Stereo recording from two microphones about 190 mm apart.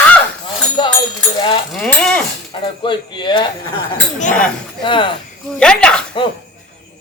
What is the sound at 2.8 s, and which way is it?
Speech, 25° left (ahead or behind).